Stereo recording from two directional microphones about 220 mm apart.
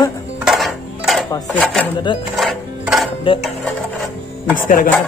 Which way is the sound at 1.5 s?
5° left (ahead or behind).